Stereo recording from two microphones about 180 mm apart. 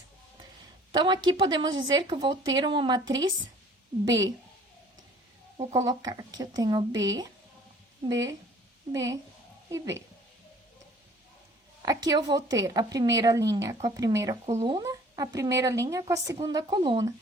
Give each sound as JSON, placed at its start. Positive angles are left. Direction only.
{"t": 0.9, "sound": "a woman's voice", "side_deg": -25}
{"t": 5.7, "sound": "a woman's voice", "side_deg": -20}
{"t": 11.8, "sound": "a woman's voice", "side_deg": -20}
{"t": 14.4, "sound": "speech", "side_deg": -35}
{"t": 14.8, "sound": "a woman's voice", "side_deg": -20}